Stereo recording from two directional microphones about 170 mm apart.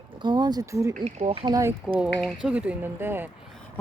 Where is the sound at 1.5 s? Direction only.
15° right (ahead or behind).